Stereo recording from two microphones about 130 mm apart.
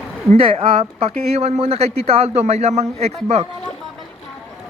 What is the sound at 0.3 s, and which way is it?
A man's voice, 45° right (ahead or behind).